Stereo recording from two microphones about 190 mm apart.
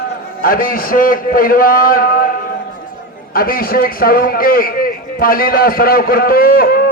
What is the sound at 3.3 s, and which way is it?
A man's voice, 50° left (ahead or behind).